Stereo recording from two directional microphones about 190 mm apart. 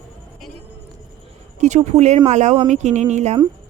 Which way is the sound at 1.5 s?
40° right (ahead or behind).